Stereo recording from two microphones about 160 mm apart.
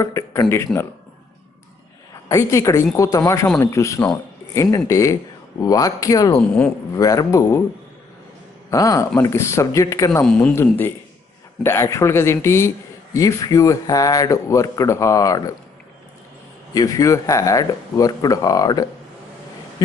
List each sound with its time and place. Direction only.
0.0 s speech: 20° left (ahead or behind)
2.2 s speech: 20° left (ahead or behind)
8.6 s speech: 20° left (ahead or behind)
10.2 s speech: 5° left (ahead or behind)
10.5 s speech: 15° left (ahead or behind)
16.7 s speech: 20° left (ahead or behind)